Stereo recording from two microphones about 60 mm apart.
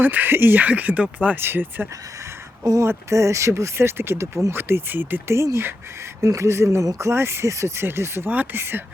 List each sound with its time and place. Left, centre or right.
0.0 s speech: right
1.4 s speech: right
3.1 s speech: right
4.5 s speech: right
5.3 s speech: right
7.9 s speech: right
8.3 s speech: right